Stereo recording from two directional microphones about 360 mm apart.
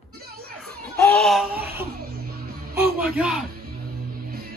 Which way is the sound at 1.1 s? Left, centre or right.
Centre.